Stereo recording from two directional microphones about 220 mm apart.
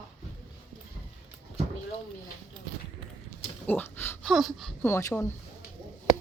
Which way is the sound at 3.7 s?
10° left (ahead or behind).